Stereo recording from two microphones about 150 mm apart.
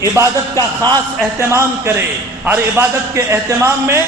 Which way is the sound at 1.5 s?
20° right (ahead or behind).